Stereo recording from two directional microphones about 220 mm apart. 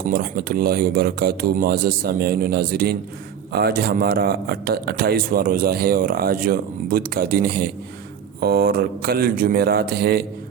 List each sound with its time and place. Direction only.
0.1 s a man's voice: 45° right (ahead or behind)